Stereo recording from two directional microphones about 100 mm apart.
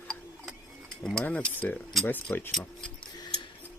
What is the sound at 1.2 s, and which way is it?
Speech, 15° left (ahead or behind).